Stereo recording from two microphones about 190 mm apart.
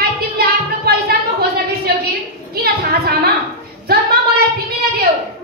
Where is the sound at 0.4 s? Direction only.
55° right (ahead or behind).